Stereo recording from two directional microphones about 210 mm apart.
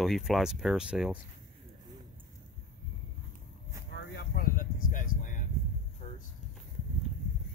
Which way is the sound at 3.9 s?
55° left (ahead or behind).